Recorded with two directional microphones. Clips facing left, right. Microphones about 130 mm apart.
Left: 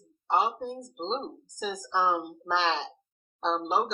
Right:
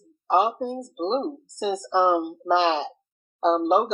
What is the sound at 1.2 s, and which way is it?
Speech, 40° right (ahead or behind).